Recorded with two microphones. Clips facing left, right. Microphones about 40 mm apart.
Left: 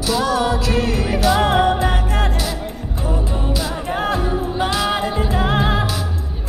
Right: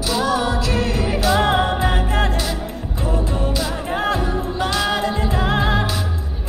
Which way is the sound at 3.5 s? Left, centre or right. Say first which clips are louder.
Even; centre.